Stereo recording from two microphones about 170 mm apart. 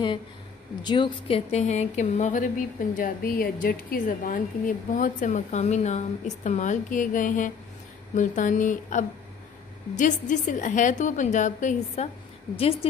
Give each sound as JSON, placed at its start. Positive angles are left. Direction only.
{"t": 0.8, "sound": "speech", "side_deg": 30}